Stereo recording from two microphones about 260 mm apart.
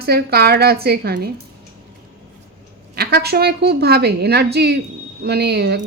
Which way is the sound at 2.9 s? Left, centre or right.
Right.